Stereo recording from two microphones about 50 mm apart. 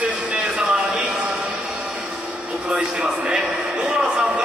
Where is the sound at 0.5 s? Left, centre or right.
Right.